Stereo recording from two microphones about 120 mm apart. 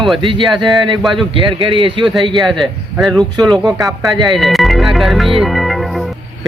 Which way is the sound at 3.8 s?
30° right (ahead or behind).